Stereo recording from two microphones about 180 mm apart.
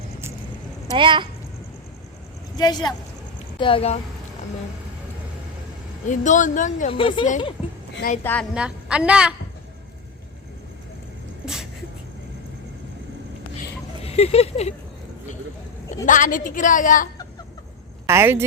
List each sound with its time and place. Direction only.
0.9 s speech: 25° right (ahead or behind)
2.6 s speech: 20° left (ahead or behind)
6.1 s a woman's voice: 45° left (ahead or behind)
6.9 s speech: 30° left (ahead or behind)
7.6 s a sound: 5° right (ahead or behind)
8.2 s a woman's voice: 10° left (ahead or behind)
8.5 s a woman's voice: 5° right (ahead or behind)
14.0 s a sound: 35° left (ahead or behind)
16.0 s a woman's voice: 45° left (ahead or behind)
18.1 s speech: 15° right (ahead or behind)